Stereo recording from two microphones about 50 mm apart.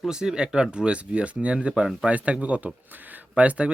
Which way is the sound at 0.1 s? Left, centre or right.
Centre.